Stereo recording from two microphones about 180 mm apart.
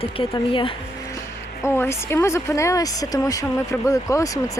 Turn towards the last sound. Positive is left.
turn(degrees=20)  # may be behind; listen again after turning